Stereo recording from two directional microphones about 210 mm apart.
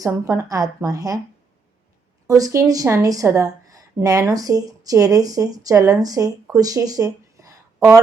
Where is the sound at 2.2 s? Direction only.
15° right (ahead or behind).